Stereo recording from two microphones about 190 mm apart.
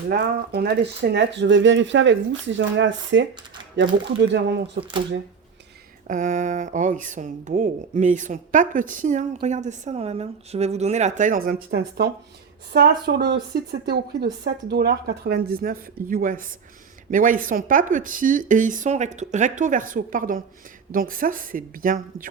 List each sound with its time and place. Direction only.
0.1 s speech: 60° right (ahead or behind); by 3.2 s 75° right (ahead or behind)
4.2 s speech: 65° right (ahead or behind)
6.1 s speech: 40° right (ahead or behind)